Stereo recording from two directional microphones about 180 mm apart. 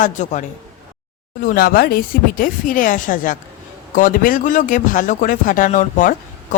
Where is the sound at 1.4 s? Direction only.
55° left (ahead or behind).